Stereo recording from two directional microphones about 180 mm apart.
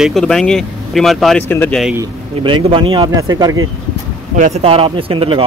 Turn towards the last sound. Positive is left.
turn(degrees=-30)  # may be behind; listen again after turning